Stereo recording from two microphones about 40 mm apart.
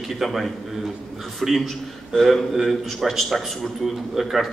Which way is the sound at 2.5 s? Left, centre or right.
Centre.